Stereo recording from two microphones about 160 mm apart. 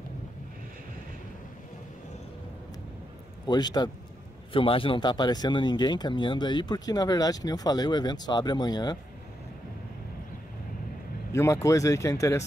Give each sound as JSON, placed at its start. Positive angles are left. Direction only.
{"t": 3.4, "sound": "speech", "side_deg": 25}
{"t": 11.3, "sound": "speech", "side_deg": 20}